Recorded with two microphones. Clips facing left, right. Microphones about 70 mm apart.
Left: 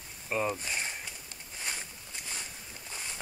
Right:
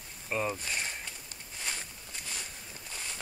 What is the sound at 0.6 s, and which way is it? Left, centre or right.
Speech, centre.